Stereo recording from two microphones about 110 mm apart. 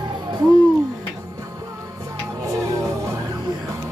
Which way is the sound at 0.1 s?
40° right (ahead or behind).